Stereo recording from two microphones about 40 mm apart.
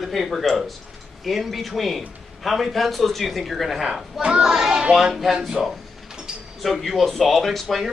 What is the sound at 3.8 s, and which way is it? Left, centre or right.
Speech, centre.